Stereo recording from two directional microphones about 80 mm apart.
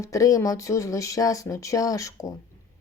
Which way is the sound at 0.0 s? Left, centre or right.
Left.